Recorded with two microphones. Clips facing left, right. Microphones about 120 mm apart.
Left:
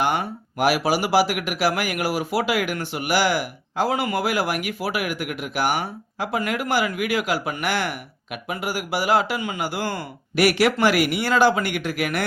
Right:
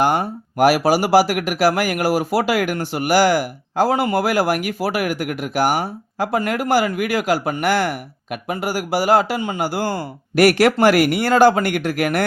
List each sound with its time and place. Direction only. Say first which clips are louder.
0.0 s speech: right 5 dB; 40° right (ahead or behind)